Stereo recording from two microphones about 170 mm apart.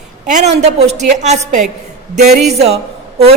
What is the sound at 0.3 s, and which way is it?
A woman's voice, 45° right (ahead or behind).